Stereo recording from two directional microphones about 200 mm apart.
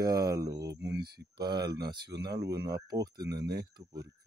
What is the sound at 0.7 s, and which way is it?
Speech, 55° right (ahead or behind).